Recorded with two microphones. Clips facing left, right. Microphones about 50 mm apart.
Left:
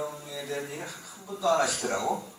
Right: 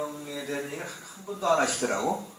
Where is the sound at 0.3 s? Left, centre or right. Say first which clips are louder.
Right 1 dB; right.